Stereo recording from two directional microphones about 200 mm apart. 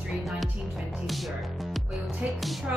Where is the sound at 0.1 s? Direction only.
Centre (ahead or behind).